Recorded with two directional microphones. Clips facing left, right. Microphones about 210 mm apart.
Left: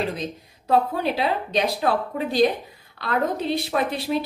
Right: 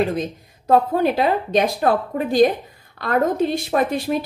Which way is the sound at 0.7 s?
50° right (ahead or behind).